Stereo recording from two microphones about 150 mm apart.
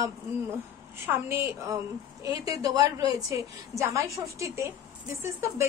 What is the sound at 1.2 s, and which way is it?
A woman's voice, 20° right (ahead or behind).